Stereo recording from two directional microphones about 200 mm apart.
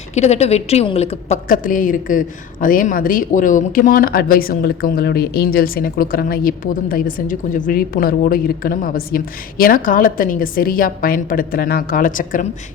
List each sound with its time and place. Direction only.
0.1 s a woman's voice: 35° left (ahead or behind)